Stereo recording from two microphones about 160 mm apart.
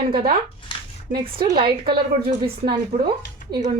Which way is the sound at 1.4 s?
70° right (ahead or behind).